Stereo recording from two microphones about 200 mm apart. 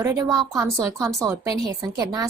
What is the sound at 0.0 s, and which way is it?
A woman's voice, 15° right (ahead or behind).